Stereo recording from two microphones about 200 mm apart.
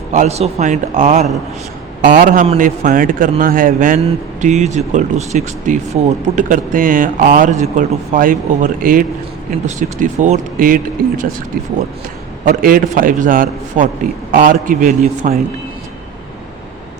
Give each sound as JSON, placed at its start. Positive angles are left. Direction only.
{"t": 0.1, "sound": "a man's voice", "side_deg": -35}
{"t": 12.5, "sound": "a man's voice", "side_deg": -45}